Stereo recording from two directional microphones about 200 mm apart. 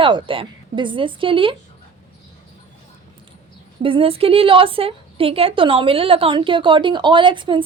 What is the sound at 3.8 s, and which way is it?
A woman's voice, 25° right (ahead or behind).